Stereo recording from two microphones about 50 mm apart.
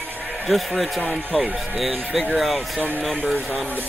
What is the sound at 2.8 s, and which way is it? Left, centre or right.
Speech, right.